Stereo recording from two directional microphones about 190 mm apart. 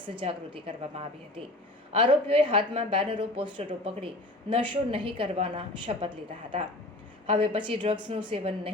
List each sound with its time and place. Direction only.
0.0 s speech: 25° right (ahead or behind)